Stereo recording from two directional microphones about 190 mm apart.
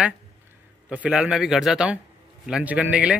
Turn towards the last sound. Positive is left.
turn(degrees=-5)  # may be behind; listen again after turning